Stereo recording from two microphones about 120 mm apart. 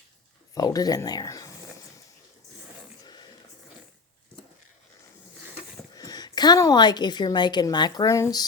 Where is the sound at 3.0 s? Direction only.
35° left (ahead or behind).